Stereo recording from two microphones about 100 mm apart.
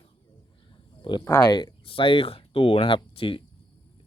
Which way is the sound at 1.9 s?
65° left (ahead or behind).